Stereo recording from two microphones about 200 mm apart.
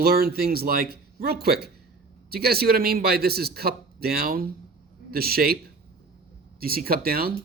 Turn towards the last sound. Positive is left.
turn(degrees=-50)  # may be behind; listen again after turning